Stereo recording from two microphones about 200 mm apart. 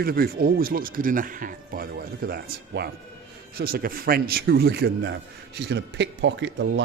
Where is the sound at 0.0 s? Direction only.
50° right (ahead or behind).